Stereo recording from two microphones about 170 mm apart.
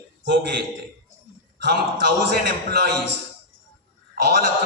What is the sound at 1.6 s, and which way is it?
A man's voice, 80° right.